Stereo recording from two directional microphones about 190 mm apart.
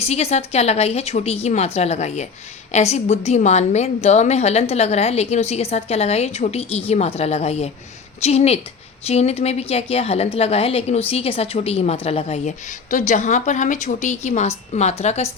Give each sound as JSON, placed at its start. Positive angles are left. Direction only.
{"t": 0.0, "sound": "a woman's voice", "side_deg": 35}